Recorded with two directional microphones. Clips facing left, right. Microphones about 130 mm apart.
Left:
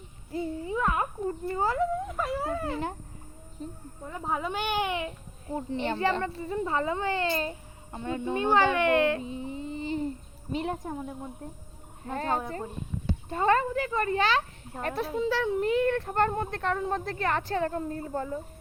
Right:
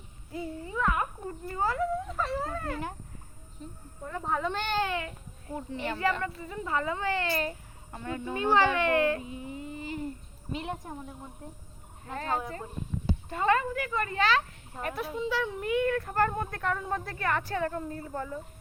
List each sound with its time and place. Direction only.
0.3 s babbling: 25° left (ahead or behind)
2.1 s a sound: 10° left (ahead or behind)
3.6 s speech: 35° left (ahead or behind)
4.3 s a child's voice: 10° left (ahead or behind); by 10.9 s 35° left (ahead or behind)
12.0 s speech: 35° left (ahead or behind)